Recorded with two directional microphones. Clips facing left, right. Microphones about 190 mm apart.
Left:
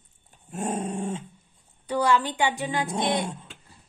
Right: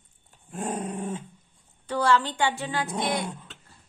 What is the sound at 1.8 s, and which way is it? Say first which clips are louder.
A woman's voice: even; 15° left (ahead or behind).